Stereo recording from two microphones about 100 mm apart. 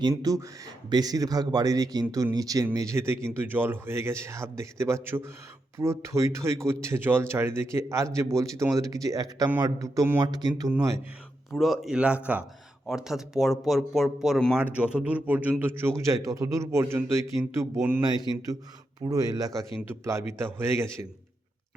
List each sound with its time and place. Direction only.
0.2 s speech: 35° right (ahead or behind)
10.2 s a man's voice: 45° right (ahead or behind)
10.7 s speech: 30° right (ahead or behind)
11.5 s speech: centre (ahead or behind)
14.5 s speech: 15° right (ahead or behind)
16.0 s speech: 35° right (ahead or behind)
18.0 s a man's voice: 45° right (ahead or behind); by 21.1 s 25° right (ahead or behind)